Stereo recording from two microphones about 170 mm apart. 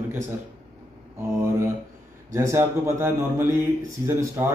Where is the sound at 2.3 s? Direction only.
15° right (ahead or behind).